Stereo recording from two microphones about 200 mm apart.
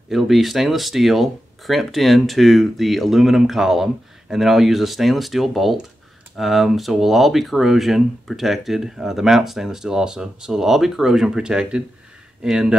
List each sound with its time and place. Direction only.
0.1 s speech: centre (ahead or behind)